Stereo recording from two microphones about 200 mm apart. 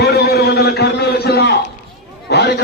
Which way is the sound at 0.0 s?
55° left (ahead or behind).